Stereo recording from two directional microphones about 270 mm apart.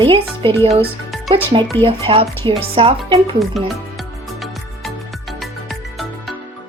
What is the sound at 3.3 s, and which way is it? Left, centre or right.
Music, centre.